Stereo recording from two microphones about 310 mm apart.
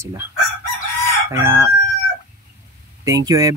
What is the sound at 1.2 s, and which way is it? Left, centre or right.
Speech, centre.